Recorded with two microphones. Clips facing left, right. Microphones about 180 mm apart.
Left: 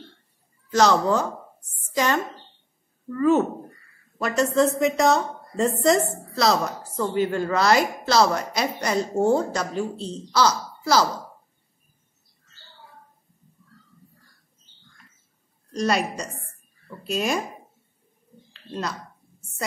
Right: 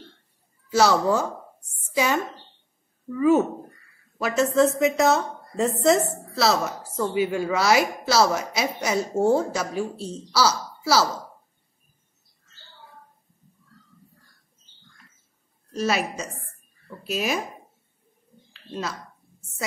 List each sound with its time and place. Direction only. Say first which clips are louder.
0.7 s a woman's voice: even; 10° right (ahead or behind)
15.7 s a woman's voice: left 1 dB; 5° right (ahead or behind)
18.5 s a sound: left 1 dB; 5° right (ahead or behind)